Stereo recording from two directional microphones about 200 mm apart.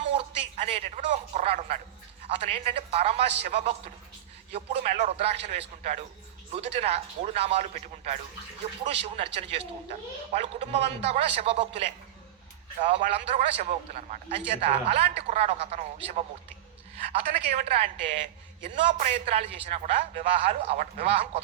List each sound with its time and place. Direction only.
0.1 s a man's voice: 30° right (ahead or behind)
12.9 s a man's voice: 30° right (ahead or behind)